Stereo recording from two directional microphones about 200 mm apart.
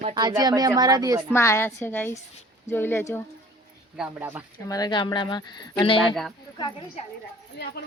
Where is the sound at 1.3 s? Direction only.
15° left (ahead or behind).